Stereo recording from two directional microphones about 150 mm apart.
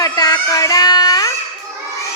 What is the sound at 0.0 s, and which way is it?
Baby cry, 25° left (ahead or behind).